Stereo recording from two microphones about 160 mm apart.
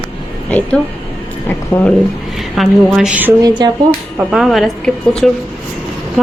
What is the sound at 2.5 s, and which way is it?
Speech, centre (ahead or behind).